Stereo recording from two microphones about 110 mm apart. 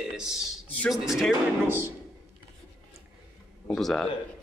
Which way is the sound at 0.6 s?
10° left (ahead or behind).